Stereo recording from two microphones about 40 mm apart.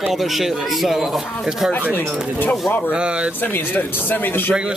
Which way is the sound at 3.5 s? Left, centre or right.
Left.